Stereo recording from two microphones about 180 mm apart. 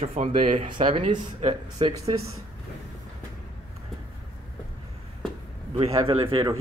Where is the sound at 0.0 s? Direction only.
35° right (ahead or behind).